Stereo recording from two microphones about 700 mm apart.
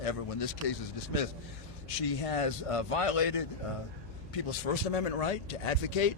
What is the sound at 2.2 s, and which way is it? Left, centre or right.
Speech, left.